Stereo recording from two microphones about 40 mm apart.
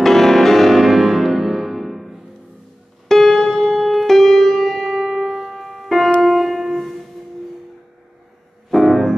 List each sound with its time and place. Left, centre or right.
0.0 s music: centre
5.0 s music: centre
5.5 s music: centre
8.6 s music: centre